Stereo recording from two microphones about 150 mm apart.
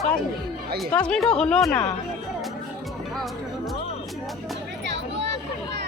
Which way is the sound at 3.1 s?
Centre (ahead or behind).